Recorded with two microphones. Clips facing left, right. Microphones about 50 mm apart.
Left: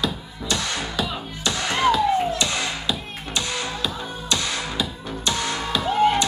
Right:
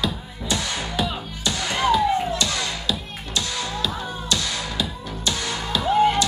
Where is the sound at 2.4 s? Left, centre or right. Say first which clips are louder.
Left 1 dB; left; by 6.2 s centre.